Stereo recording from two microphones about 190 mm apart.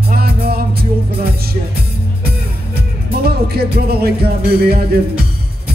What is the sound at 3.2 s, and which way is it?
Music, 55° right (ahead or behind).